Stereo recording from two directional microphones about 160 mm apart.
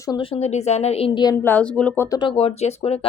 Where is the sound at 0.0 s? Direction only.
30° left (ahead or behind).